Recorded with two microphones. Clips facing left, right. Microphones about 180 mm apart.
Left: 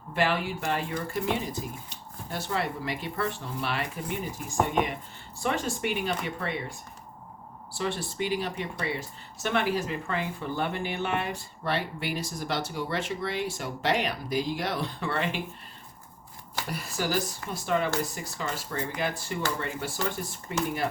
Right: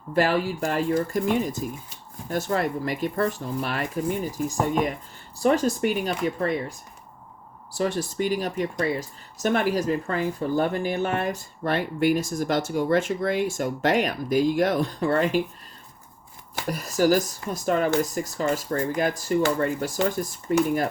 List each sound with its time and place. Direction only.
0.1 s speech: 40° right (ahead or behind)
7.7 s speech: 40° right (ahead or behind)
16.6 s speech: 45° right (ahead or behind)